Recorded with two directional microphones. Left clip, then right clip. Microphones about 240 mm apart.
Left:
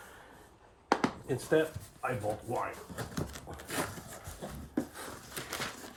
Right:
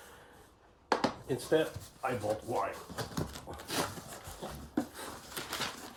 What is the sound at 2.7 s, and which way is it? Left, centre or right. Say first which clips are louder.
Speech: right 1 dB; centre.